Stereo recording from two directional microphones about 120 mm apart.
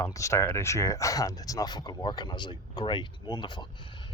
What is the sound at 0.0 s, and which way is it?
Speech, 25° left (ahead or behind).